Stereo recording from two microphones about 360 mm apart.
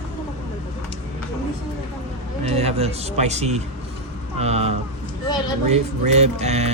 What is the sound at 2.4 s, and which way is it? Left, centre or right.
Speech, centre.